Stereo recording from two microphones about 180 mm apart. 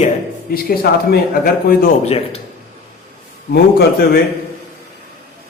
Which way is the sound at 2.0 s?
35° left (ahead or behind).